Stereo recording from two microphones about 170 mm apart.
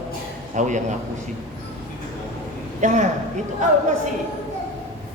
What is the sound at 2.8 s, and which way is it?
Speech, 45° right (ahead or behind).